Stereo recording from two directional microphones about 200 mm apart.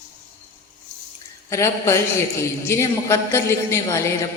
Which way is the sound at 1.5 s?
15° left (ahead or behind).